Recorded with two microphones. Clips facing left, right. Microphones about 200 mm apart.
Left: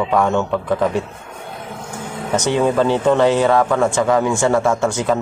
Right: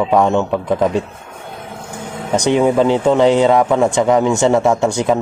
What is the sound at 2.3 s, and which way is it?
Speech, 15° right (ahead or behind).